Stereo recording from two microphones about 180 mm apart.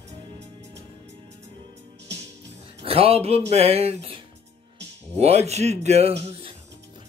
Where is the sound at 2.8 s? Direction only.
30° right (ahead or behind).